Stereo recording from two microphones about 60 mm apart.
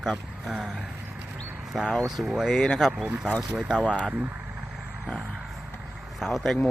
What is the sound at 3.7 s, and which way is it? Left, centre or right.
Speech, centre.